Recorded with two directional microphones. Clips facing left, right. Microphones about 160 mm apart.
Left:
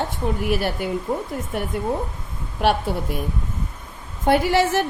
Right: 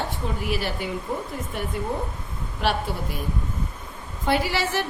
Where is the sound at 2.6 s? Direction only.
50° left (ahead or behind).